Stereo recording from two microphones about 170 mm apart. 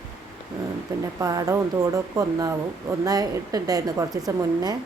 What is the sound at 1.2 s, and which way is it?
A woman's voice, 20° right (ahead or behind).